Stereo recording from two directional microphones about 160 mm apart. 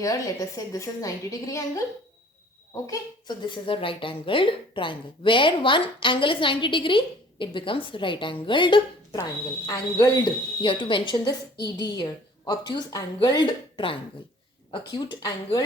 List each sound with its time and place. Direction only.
0.0 s a woman's voice: 20° left (ahead or behind)